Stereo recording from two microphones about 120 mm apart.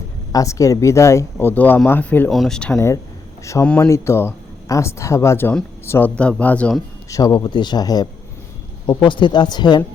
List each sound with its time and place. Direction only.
0.3 s speech: 25° left (ahead or behind)
2.3 s speech: 5° left (ahead or behind)
2.7 s speech: 25° left (ahead or behind)
7.1 s speech: 30° left (ahead or behind)